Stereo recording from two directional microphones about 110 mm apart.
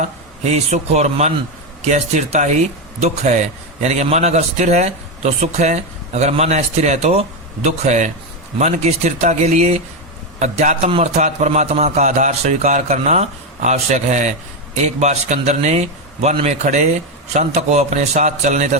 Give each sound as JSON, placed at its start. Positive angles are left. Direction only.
{"t": 0.4, "sound": "a man's voice", "side_deg": -90}